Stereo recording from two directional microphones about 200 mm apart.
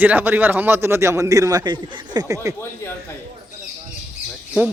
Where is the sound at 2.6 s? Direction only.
15° left (ahead or behind).